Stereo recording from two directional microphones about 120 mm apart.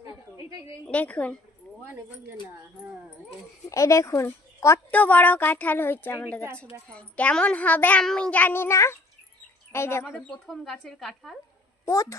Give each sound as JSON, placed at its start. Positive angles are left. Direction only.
{"t": 0.0, "sound": "a sound", "side_deg": -30}
{"t": 0.8, "sound": "a child's voice", "side_deg": 10}
{"t": 3.7, "sound": "speech", "side_deg": 25}
{"t": 4.9, "sound": "a child's voice", "side_deg": 15}
{"t": 10.1, "sound": "speech", "side_deg": 5}
{"t": 11.8, "sound": "a child's voice", "side_deg": 25}